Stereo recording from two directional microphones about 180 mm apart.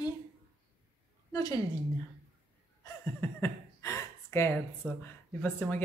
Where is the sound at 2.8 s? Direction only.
15° left (ahead or behind).